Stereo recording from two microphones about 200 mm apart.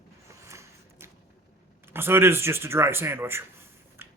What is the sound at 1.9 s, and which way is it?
Speech, 10° right (ahead or behind).